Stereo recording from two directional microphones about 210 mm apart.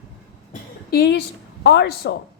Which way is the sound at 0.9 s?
50° left (ahead or behind).